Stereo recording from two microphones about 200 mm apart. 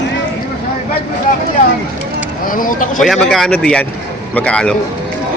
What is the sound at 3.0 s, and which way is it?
Speech, centre (ahead or behind).